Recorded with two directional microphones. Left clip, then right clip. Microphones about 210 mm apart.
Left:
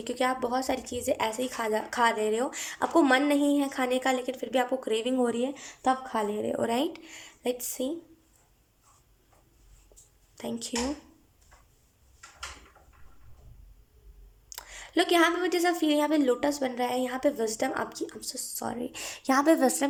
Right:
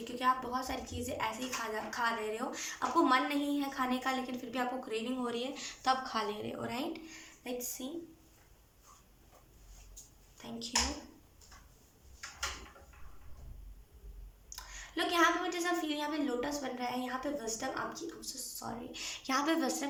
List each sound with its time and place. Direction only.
0.0 s speech: 50° left (ahead or behind)
10.3 s speech: 45° left (ahead or behind)
14.5 s speech: 50° left (ahead or behind)